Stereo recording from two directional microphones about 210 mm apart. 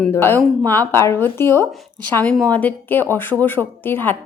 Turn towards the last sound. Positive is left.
turn(degrees=10)  # may be behind; listen again after turning